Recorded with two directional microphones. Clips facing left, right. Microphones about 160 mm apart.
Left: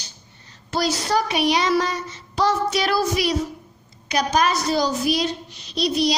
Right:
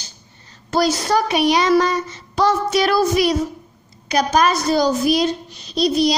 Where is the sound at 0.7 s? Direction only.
50° right (ahead or behind).